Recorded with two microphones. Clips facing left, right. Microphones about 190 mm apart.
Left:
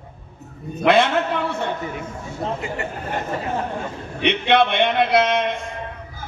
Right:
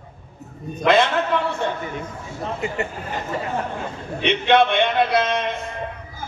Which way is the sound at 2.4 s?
30° left (ahead or behind).